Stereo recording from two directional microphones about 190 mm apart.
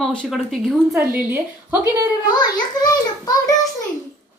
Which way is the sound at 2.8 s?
20° left (ahead or behind).